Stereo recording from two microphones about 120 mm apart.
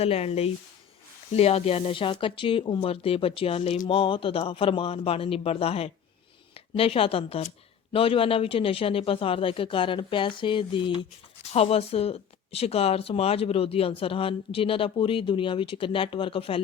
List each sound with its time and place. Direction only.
0.0 s speech: 55° left (ahead or behind)
11.5 s speech: 55° left (ahead or behind)